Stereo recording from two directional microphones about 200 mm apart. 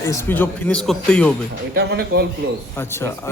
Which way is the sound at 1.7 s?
50° right (ahead or behind).